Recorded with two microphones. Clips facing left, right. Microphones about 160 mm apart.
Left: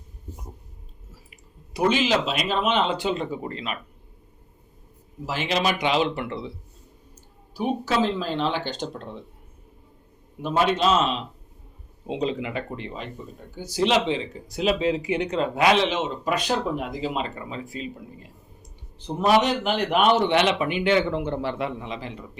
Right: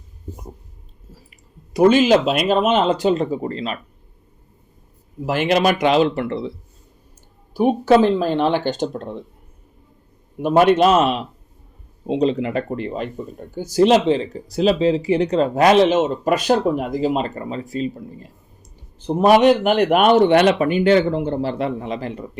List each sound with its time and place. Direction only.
1.7 s speech: 50° right (ahead or behind)
5.2 s speech: 55° right (ahead or behind); by 6.5 s 40° right (ahead or behind)
7.5 s speech: 55° right (ahead or behind)
10.4 s speech: 60° right (ahead or behind)
12.0 s speech: 35° right (ahead or behind)
18.9 s speech: 55° right (ahead or behind)